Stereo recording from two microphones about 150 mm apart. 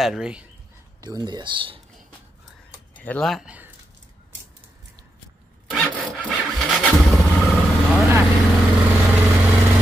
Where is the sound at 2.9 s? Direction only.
10° left (ahead or behind); by 3.7 s 5° right (ahead or behind).